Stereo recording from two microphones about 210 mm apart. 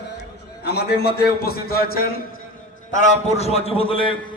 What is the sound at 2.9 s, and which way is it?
A man's voice, 35° left (ahead or behind).